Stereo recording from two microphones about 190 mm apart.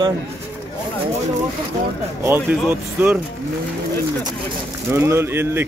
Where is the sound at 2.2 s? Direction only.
10° right (ahead or behind).